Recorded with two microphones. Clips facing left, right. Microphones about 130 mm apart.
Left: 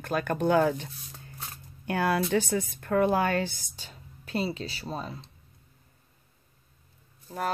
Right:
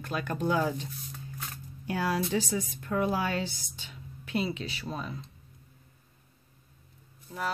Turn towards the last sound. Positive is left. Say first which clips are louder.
# left 3 dB
turn(degrees=45)  # may be behind; listen again after turning